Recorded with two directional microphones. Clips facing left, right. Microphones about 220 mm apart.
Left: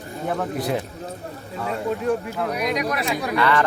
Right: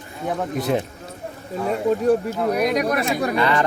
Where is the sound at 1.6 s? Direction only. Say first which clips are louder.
Right 5 dB; 40° right (ahead or behind).